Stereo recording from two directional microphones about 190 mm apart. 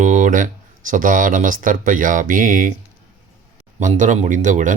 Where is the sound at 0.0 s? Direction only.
40° right (ahead or behind).